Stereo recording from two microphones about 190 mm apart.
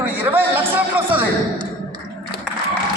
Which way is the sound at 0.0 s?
10° right (ahead or behind).